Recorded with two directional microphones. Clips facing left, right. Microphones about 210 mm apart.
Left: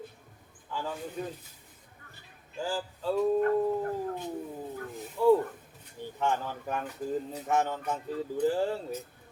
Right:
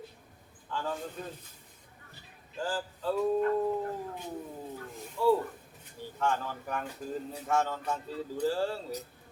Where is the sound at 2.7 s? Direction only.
10° left (ahead or behind).